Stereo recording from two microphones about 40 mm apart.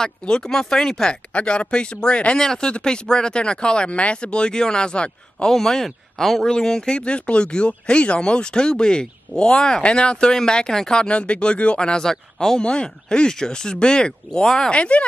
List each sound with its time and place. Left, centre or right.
0.4 s speech: centre
1.3 s speech: left
2.3 s speech: centre
5.5 s speech: centre
7.0 s speech: left
14.7 s speech: left